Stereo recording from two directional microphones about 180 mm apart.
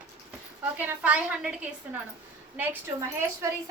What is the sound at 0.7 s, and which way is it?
A woman's voice, 10° right (ahead or behind).